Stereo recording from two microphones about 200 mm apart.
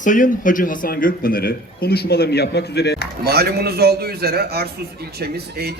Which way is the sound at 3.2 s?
50° right (ahead or behind).